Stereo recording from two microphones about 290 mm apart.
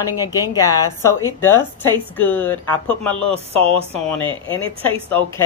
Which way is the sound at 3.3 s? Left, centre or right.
Centre.